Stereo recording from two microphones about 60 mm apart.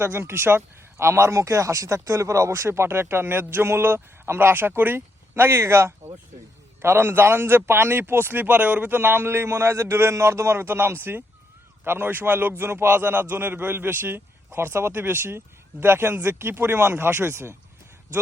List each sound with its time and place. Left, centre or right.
0.0 s a man's voice: right
17.1 s speech: right